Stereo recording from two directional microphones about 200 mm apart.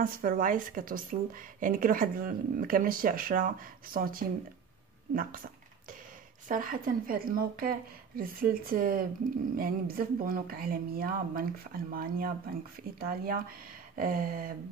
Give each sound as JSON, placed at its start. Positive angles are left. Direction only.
{"t": 0.0, "sound": "speech", "side_deg": -45}
{"t": 6.5, "sound": "speech", "side_deg": -45}